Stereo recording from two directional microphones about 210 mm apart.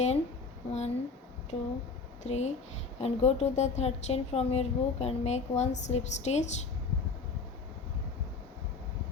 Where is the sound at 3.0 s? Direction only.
30° left (ahead or behind).